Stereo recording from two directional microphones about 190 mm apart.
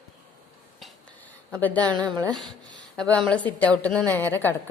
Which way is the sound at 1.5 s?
10° left (ahead or behind).